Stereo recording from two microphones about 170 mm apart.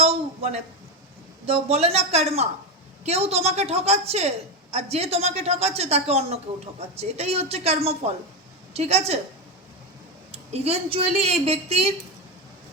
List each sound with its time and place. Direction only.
0.0 s a sound: 35° right (ahead or behind)
1.5 s a woman's voice: 35° right (ahead or behind)
10.3 s a woman's voice: 35° right (ahead or behind)